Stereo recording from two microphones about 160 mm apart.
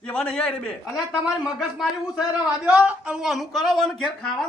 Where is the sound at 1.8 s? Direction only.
5° right (ahead or behind).